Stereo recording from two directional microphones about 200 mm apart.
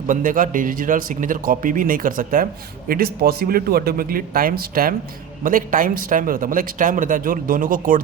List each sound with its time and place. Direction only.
0.1 s speech: 40° right (ahead or behind)